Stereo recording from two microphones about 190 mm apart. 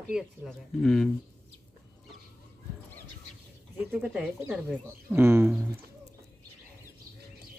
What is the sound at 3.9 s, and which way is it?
Speech, 5° right (ahead or behind).